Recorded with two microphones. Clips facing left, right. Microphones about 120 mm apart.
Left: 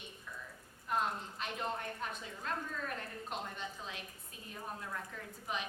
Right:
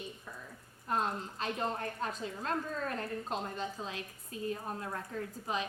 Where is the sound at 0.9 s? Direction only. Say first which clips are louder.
Right 2 dB; 35° right (ahead or behind).